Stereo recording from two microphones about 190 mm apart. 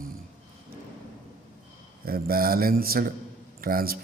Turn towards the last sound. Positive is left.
turn(degrees=-50)  # may be behind; listen again after turning